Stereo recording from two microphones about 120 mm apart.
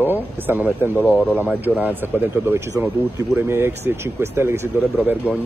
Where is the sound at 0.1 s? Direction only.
15° right (ahead or behind).